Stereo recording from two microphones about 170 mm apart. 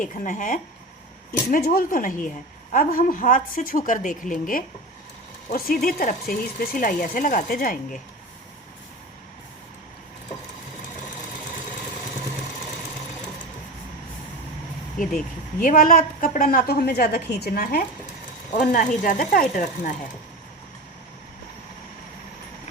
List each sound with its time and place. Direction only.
0.0 s a woman's voice: 50° left (ahead or behind)
15.6 s speech: 55° left (ahead or behind)
18.5 s a woman's voice: 50° left (ahead or behind)